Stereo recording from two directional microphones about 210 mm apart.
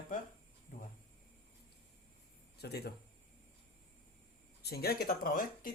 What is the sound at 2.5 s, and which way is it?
Speech, 50° left (ahead or behind).